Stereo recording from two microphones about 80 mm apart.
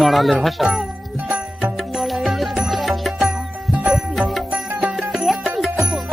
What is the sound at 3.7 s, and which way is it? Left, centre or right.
Music, centre.